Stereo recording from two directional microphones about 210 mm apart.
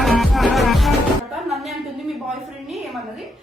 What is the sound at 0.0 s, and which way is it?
Music, centre (ahead or behind).